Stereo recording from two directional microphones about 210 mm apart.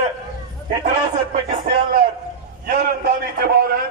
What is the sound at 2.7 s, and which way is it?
A man's voice, 50° right (ahead or behind).